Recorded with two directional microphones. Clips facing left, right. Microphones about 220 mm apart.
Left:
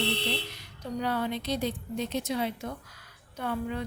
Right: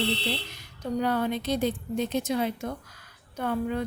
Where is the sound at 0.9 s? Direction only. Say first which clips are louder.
Right 4 dB; 50° right (ahead or behind).